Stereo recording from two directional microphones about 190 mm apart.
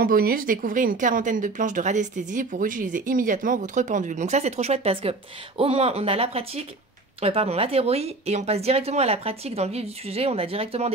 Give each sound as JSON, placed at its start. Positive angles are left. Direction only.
{"t": 0.0, "sound": "speech", "side_deg": -50}